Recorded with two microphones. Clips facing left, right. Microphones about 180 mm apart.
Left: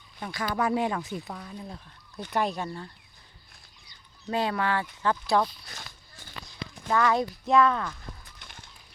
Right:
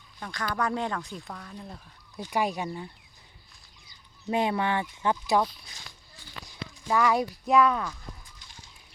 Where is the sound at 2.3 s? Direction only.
10° right (ahead or behind).